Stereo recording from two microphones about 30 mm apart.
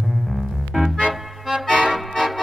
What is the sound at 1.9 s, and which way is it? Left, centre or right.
Accordion, centre.